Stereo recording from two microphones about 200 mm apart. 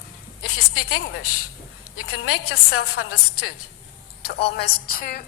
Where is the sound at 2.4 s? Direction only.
90° left.